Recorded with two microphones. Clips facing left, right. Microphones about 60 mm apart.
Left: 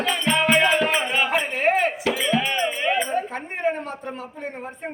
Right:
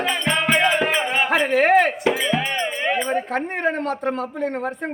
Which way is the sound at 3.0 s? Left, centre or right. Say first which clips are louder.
Right 4 dB; right.